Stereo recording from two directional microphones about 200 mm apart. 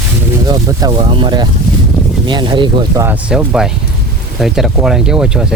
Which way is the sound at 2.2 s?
20° right (ahead or behind).